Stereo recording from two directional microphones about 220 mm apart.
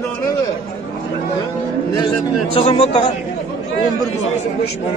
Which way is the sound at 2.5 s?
25° left (ahead or behind).